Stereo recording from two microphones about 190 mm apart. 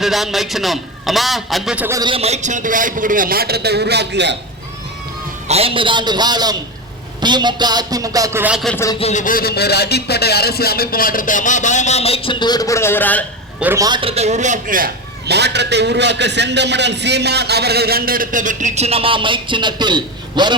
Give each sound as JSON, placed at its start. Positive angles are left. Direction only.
{"t": 0.0, "sound": "a man's voice", "side_deg": 0}
{"t": 2.0, "sound": "a man's voice", "side_deg": -30}
{"t": 5.5, "sound": "a man's voice", "side_deg": -30}
{"t": 8.7, "sound": "speech", "side_deg": 15}
{"t": 9.0, "sound": "speech", "side_deg": 35}
{"t": 13.6, "sound": "a man's voice", "side_deg": -10}
{"t": 13.8, "sound": "a man's voice", "side_deg": -25}
{"t": 15.3, "sound": "a man's voice", "side_deg": -60}